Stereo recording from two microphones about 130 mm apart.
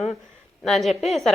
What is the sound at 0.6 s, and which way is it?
Speech, centre (ahead or behind).